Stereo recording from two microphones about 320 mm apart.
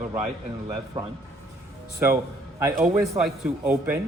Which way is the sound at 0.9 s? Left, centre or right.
Centre.